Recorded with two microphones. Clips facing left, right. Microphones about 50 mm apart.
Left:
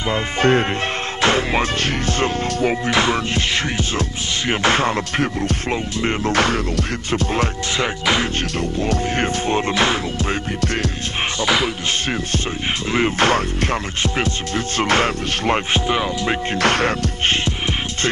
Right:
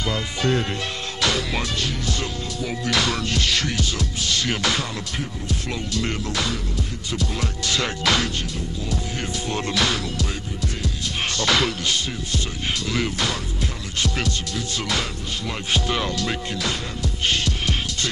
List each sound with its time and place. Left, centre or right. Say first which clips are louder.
0.1 s music: left 8 dB; left
2.9 s music: left 5 dB; left
5.7 s music: left 2 dB; left
6.3 s music: left 8 dB; left
7.7 s music: left 2 dB; left
8.5 s music: left 8 dB; left
9.5 s music: left 3 dB; left
11.3 s music: left 2 dB; centre
12.9 s music: left 11 dB; left
14.1 s music: left 5 dB; left
16.5 s speech: left 10 dB; left